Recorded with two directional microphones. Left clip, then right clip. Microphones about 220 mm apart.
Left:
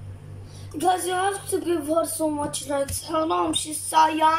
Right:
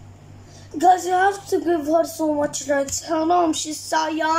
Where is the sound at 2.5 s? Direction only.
35° right (ahead or behind).